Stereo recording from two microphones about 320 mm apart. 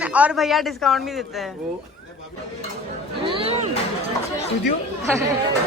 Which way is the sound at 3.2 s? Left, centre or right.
Centre.